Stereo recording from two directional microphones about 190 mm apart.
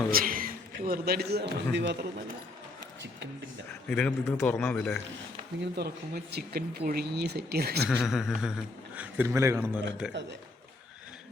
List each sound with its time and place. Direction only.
0.1 s a man's voice: 50° right (ahead or behind)
3.8 s a man's voice: 5° left (ahead or behind)
5.7 s speech: 60° right (ahead or behind)
7.9 s a man's voice: centre (ahead or behind)